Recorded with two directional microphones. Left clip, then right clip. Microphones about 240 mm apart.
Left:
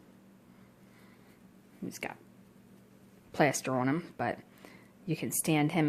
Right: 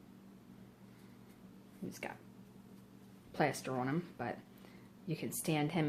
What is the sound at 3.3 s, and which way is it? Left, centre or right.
Speech, left.